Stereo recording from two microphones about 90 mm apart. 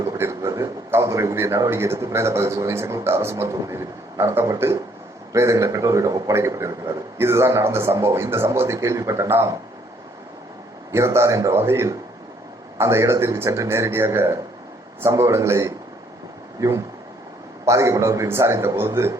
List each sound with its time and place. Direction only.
0.0 s a sound: 35° right (ahead or behind)
0.9 s a man's voice: 35° right (ahead or behind)
10.9 s a man's voice: 30° right (ahead or behind)